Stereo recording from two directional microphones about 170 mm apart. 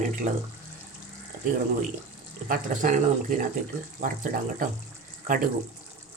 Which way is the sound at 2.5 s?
50° right (ahead or behind).